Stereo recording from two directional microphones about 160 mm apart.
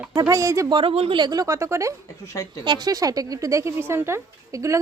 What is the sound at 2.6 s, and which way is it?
Speech, 25° right (ahead or behind).